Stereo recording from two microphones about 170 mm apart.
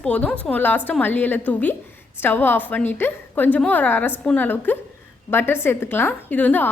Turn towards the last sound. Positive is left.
turn(degrees=10)  # may be behind; listen again after turning